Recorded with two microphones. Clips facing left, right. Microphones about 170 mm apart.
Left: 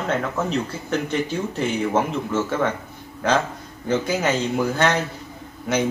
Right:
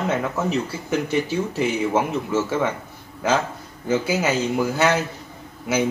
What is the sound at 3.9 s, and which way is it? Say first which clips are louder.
A man's voice: even; 5° right (ahead or behind).